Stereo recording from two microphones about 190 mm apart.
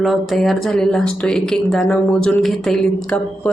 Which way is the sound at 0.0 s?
Centre (ahead or behind).